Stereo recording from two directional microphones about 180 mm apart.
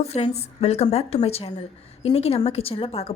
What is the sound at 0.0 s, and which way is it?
A woman's voice, 35° left (ahead or behind).